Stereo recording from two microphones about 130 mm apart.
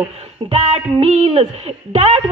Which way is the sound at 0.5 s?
50° right (ahead or behind).